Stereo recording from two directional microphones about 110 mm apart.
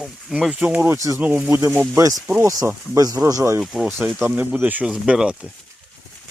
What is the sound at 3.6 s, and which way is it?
Speech, centre (ahead or behind).